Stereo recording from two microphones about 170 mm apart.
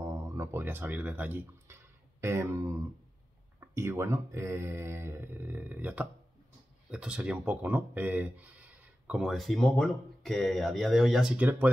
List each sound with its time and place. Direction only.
0.0 s speech: 15° right (ahead or behind)